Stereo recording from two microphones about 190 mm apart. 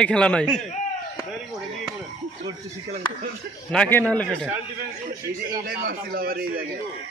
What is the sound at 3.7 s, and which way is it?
Speech, 10° left (ahead or behind).